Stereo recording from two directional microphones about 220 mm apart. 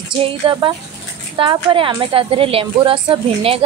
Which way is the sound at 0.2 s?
20° right (ahead or behind).